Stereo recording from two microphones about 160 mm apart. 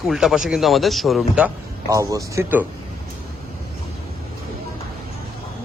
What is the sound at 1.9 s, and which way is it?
Speech, 20° right (ahead or behind).